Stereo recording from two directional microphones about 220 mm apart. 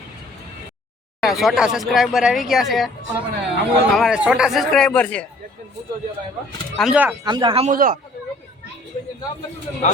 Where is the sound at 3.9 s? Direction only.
Centre (ahead or behind).